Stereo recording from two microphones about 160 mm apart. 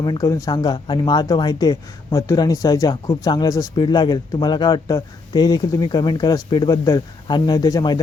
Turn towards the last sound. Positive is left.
turn(degrees=25)  # may be behind; listen again after turning